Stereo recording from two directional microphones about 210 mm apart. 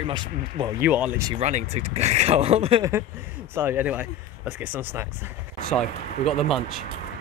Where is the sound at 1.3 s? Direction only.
30° right (ahead or behind).